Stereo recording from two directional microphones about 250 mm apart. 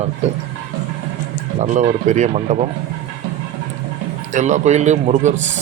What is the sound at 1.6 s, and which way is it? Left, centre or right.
Speech, right.